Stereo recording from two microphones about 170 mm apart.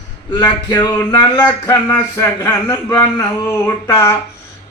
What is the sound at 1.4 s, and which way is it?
Speech, 10° left (ahead or behind).